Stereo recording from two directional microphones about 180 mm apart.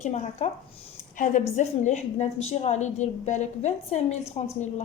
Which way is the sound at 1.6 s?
40° left (ahead or behind).